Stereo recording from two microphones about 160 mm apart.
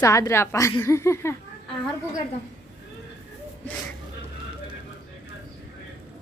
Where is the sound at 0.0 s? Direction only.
20° left (ahead or behind).